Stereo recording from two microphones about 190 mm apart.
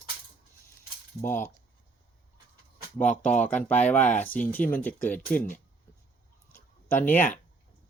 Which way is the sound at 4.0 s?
45° left (ahead or behind).